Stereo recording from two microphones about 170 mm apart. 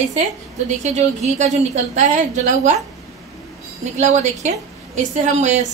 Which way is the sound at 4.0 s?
45° right (ahead or behind).